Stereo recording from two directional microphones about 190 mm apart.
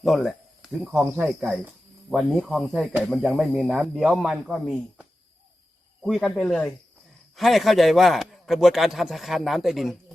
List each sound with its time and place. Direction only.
0.0 s speech: centre (ahead or behind)
1.1 s speech: 10° right (ahead or behind)
2.0 s speech: centre (ahead or behind)